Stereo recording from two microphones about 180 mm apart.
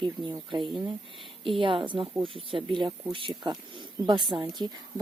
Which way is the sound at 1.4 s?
30° right (ahead or behind).